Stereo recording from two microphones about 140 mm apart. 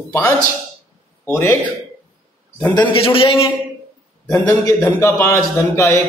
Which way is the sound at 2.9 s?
40° left (ahead or behind).